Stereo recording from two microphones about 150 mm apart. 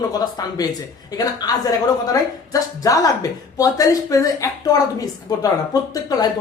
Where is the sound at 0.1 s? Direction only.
25° left (ahead or behind).